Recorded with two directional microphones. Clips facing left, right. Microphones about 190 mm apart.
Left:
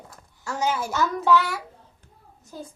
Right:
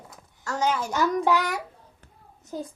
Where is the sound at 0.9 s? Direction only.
15° right (ahead or behind).